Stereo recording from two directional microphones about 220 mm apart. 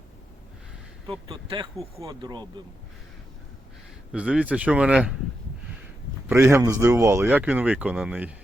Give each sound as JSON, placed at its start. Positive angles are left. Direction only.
{"t": 1.3, "sound": "speech", "side_deg": -20}
{"t": 4.1, "sound": "speech", "side_deg": -5}
{"t": 6.2, "sound": "speech", "side_deg": -10}